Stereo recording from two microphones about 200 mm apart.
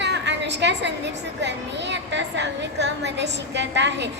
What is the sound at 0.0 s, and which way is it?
A woman's voice, 60° right (ahead or behind).